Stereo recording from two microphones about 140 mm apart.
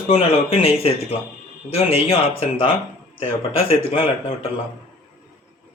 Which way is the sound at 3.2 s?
45° left (ahead or behind).